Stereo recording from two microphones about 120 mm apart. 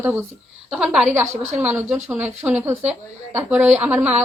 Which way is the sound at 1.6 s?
15° right (ahead or behind).